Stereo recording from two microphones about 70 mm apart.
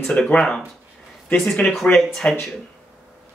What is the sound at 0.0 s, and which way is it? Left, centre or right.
Speech, centre.